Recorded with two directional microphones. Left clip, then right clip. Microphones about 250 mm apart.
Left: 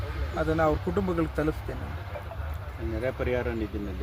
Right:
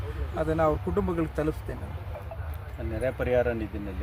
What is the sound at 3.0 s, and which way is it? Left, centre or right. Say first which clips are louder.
Speech: right 4 dB; right.